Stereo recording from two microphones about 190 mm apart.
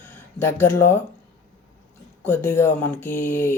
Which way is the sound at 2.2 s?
10° left (ahead or behind).